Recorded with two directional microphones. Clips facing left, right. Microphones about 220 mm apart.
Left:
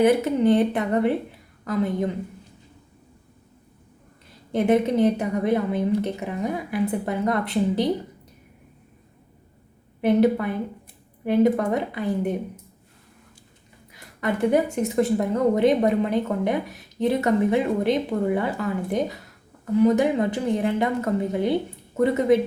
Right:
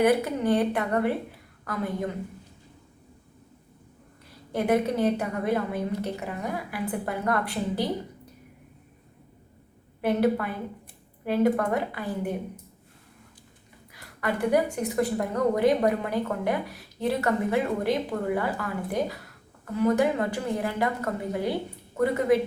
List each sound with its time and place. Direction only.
0.0 s a woman's voice: 20° left (ahead or behind)
4.5 s a woman's voice: 20° left (ahead or behind)
10.0 s a woman's voice: 20° left (ahead or behind)
13.9 s a woman's voice: 20° left (ahead or behind)